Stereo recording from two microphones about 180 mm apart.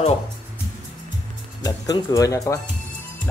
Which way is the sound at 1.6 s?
20° left (ahead or behind).